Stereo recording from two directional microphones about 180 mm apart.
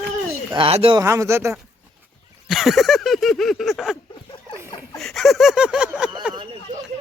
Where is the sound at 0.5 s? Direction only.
30° right (ahead or behind).